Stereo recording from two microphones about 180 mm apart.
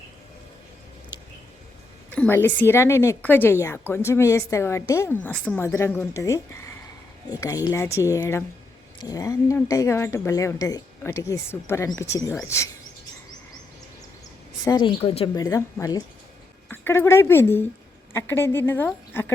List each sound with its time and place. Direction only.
2.0 s a woman's voice: 10° left (ahead or behind)
14.6 s a woman's voice: 25° left (ahead or behind)
15.4 s a woman's voice: 20° left (ahead or behind)